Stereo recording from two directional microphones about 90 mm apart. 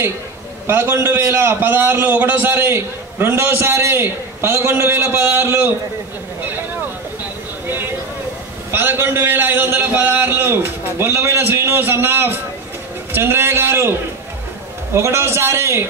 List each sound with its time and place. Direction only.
0.7 s a man's voice: 25° right (ahead or behind)
7.6 s a sound: 25° right (ahead or behind)
8.7 s a man's voice: 25° right (ahead or behind)
15.0 s a man's voice: 30° right (ahead or behind)